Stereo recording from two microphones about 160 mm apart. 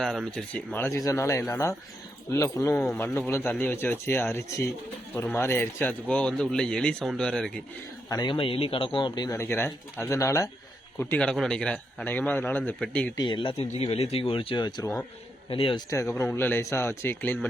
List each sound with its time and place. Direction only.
0.0 s a man's voice: centre (ahead or behind)
8.1 s a man's voice: 30° left (ahead or behind); by 13.1 s 5° left (ahead or behind)
13.1 s speech: 30° left (ahead or behind)
15.9 s a man's voice: 20° left (ahead or behind)